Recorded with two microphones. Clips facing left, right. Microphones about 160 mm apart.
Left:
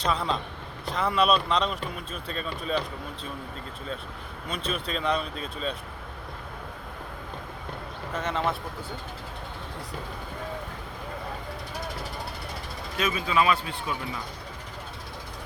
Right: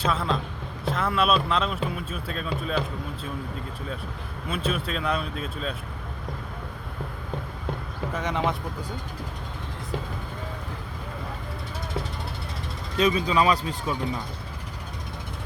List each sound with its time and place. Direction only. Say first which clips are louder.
0.0 s speech: right 1 dB; centre (ahead or behind)
4.4 s speech: right 3 dB; 5° right (ahead or behind)
8.1 s speech: right 1 dB; 15° right (ahead or behind)
13.0 s speech: right 4 dB; 35° right (ahead or behind)